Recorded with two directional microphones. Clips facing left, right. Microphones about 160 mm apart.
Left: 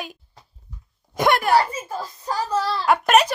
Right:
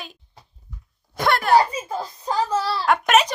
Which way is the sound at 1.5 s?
20° right (ahead or behind).